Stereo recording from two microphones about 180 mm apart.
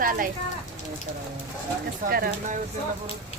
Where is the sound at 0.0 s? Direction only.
50° right (ahead or behind).